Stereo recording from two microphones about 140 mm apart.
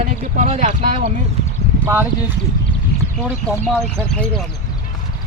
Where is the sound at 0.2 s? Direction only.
60° right (ahead or behind).